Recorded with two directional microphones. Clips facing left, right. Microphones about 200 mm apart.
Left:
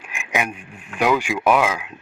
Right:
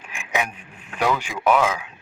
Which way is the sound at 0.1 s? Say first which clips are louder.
Left 1 dB; 10° left (ahead or behind).